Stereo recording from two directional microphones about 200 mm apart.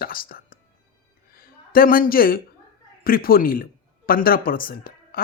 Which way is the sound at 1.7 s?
45° left (ahead or behind).